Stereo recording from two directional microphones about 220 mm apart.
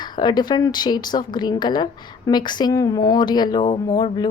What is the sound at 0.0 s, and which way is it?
Speech, 20° left (ahead or behind).